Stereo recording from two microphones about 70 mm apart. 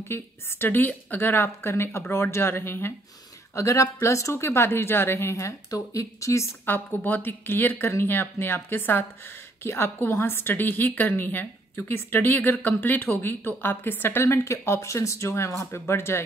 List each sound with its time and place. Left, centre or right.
0.1 s a woman's voice: left
3.5 s a woman's voice: left
5.7 s speech: left
6.6 s a woman's voice: left